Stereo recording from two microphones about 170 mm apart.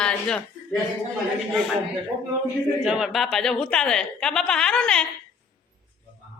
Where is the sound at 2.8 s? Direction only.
5° right (ahead or behind).